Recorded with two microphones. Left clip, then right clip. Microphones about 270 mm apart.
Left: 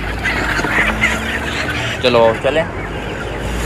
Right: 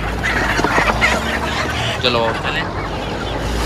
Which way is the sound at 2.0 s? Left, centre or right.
Centre.